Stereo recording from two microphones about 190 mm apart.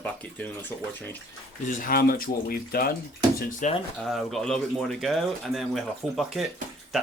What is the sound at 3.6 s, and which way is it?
Speech, 40° left (ahead or behind).